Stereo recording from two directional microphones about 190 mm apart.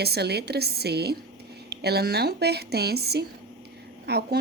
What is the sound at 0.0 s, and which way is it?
A woman's voice, 60° right (ahead or behind).